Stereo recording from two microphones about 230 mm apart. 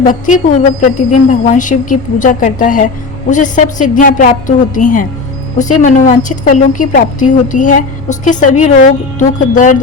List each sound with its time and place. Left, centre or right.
0.0 s a woman's voice: left